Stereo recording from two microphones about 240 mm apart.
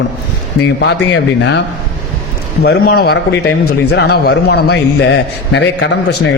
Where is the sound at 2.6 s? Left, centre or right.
Left.